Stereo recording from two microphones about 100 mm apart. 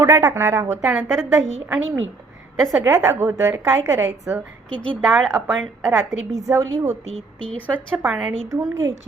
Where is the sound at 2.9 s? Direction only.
30° right (ahead or behind).